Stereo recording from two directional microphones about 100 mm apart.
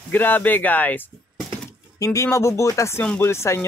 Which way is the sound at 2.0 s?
30° left (ahead or behind).